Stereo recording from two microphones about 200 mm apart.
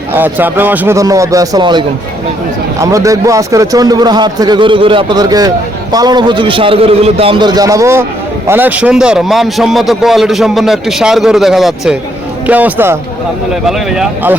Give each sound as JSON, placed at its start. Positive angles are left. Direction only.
{"t": 0.1, "sound": "a man's voice", "side_deg": -10}
{"t": 2.8, "sound": "a man's voice", "side_deg": -15}